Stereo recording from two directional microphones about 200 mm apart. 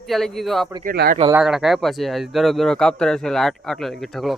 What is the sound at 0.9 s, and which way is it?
Speech, 45° right (ahead or behind).